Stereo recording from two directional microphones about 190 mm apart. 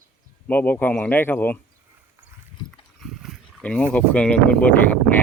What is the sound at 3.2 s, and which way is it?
Speech, 5° left (ahead or behind).